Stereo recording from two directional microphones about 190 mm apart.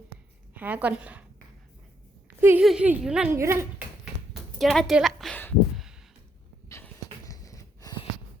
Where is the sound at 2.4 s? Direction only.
10° right (ahead or behind).